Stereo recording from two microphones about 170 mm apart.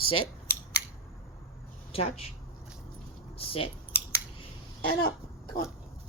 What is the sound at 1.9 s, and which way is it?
Speech, 35° left (ahead or behind).